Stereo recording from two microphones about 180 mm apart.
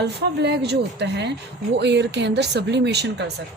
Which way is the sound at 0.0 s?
70° right (ahead or behind).